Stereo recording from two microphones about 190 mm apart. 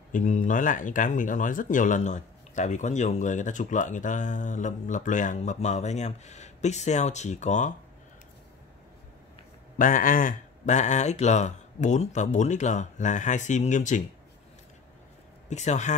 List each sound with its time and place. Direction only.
0.1 s speech: 40° left (ahead or behind)
9.8 s speech: 45° left (ahead or behind)
15.5 s speech: 40° left (ahead or behind)